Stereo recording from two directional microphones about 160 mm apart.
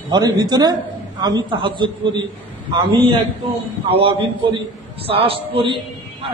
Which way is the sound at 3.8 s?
35° right (ahead or behind).